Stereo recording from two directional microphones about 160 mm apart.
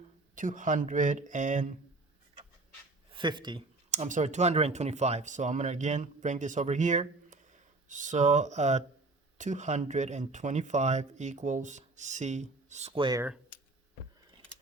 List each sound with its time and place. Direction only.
0.3 s speech: 55° right (ahead or behind)
3.1 s speech: 30° right (ahead or behind)
3.9 s speech: 45° right (ahead or behind)
13.0 s speech: 25° right (ahead or behind)